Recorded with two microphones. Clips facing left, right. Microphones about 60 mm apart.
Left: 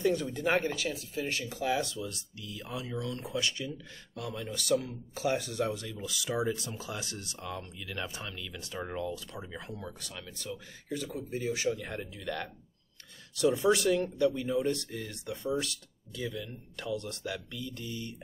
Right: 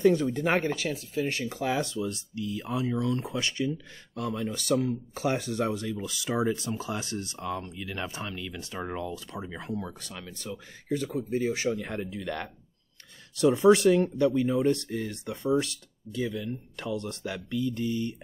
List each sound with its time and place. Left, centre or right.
0.0 s speech: right
13.7 s speech: right